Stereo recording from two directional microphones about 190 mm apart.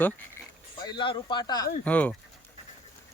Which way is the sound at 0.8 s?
25° left (ahead or behind).